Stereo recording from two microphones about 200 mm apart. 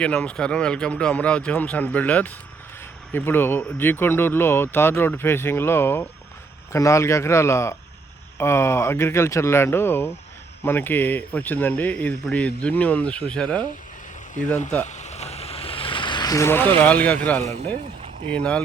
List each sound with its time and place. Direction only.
0.0 s speech: 5° left (ahead or behind)
14.8 s a sound: 35° left (ahead or behind); by 16.6 s 15° left (ahead or behind)
16.7 s speech: 5° left (ahead or behind)
18.3 s speech: 5° left (ahead or behind)